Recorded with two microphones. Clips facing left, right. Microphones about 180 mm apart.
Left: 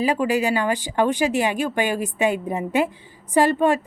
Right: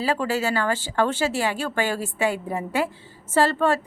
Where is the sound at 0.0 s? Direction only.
15° left (ahead or behind).